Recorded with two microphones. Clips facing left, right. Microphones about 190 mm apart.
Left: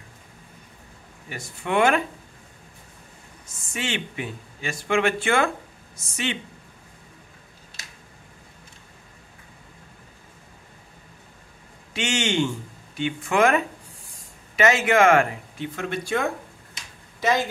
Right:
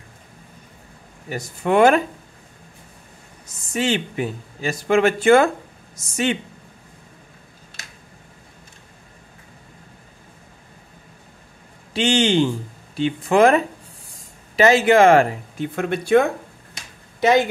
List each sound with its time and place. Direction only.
1.3 s speech: 40° right (ahead or behind)
3.4 s speech: 40° right (ahead or behind)
11.9 s speech: 35° right (ahead or behind); by 16.3 s 60° right (ahead or behind)